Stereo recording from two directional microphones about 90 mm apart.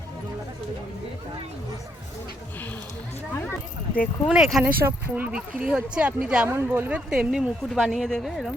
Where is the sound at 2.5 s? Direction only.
20° left (ahead or behind).